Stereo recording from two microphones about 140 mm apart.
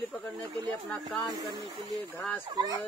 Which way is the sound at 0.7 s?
Centre (ahead or behind).